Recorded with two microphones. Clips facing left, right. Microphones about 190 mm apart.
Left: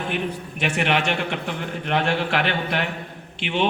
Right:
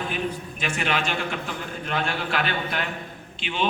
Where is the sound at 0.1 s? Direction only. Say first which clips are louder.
Left 2 dB; 70° left (ahead or behind).